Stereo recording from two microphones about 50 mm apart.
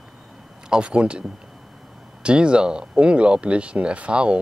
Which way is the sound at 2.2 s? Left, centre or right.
Right.